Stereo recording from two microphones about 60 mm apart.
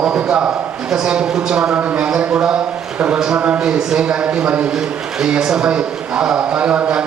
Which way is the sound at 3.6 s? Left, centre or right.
Centre.